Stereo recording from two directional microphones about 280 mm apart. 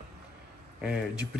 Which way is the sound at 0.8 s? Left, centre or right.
Centre.